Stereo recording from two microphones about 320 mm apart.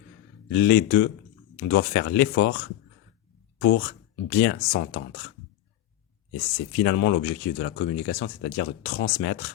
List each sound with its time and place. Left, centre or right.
0.5 s speech: left
3.6 s speech: left
6.8 s speech: left